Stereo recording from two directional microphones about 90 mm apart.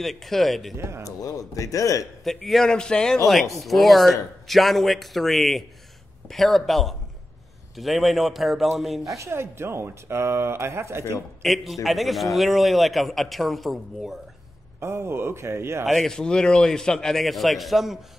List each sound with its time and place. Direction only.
0.0 s a man's voice: centre (ahead or behind)
0.7 s speech: 30° right (ahead or behind)
1.0 s speech: 40° left (ahead or behind)
2.2 s a man's voice: centre (ahead or behind)
9.0 s speech: 35° right (ahead or behind)
11.4 s a man's voice: centre (ahead or behind)
14.8 s speech: 30° right (ahead or behind)
15.8 s a man's voice: centre (ahead or behind)